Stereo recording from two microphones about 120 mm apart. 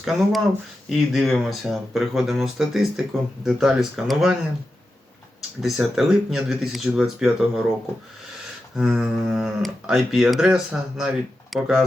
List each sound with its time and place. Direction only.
0.0 s speech: centre (ahead or behind)
5.6 s speech: 5° right (ahead or behind)
8.7 s speech: 5° right (ahead or behind)